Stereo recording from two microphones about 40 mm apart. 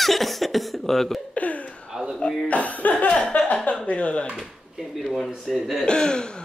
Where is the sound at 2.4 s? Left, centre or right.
Left.